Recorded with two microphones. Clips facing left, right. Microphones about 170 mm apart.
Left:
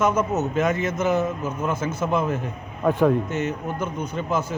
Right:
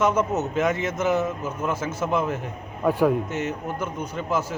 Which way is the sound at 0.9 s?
15° left (ahead or behind).